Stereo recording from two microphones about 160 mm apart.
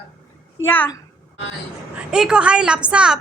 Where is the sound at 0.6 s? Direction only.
15° left (ahead or behind).